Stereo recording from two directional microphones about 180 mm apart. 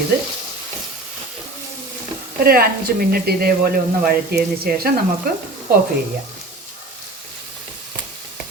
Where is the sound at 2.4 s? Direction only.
55° right (ahead or behind).